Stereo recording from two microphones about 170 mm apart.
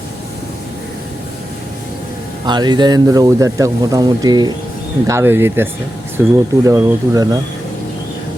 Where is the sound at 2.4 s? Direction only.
25° right (ahead or behind).